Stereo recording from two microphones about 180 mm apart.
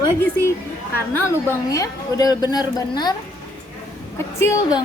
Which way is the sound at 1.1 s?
10° left (ahead or behind).